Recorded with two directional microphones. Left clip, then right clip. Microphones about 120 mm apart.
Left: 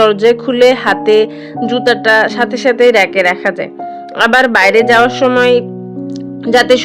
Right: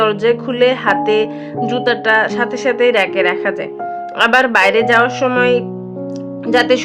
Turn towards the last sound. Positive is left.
turn(degrees=30)  # may be behind; listen again after turning